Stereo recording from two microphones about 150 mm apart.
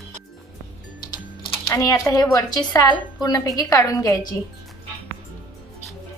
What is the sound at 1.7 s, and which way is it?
A woman's voice, 20° left (ahead or behind).